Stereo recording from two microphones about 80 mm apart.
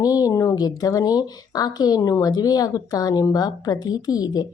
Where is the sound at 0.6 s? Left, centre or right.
Left.